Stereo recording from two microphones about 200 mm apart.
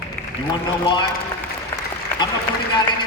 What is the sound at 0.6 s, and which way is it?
Speech, 25° left (ahead or behind).